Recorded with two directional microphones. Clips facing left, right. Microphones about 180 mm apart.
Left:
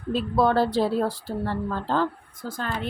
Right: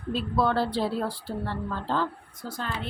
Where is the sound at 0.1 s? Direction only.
45° left (ahead or behind).